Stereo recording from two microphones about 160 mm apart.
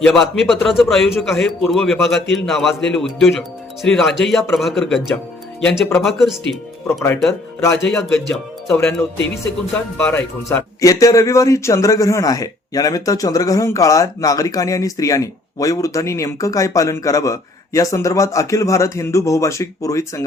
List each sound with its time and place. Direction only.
0.0 s a man's voice: centre (ahead or behind)
6.8 s speech: 15° left (ahead or behind)
7.9 s a man's voice: 5° left (ahead or behind)
10.1 s a man's voice: 10° left (ahead or behind)